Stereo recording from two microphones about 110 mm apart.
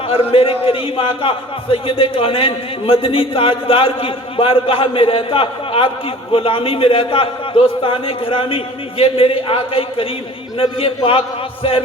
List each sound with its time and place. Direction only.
0.1 s a man's voice: 60° left (ahead or behind)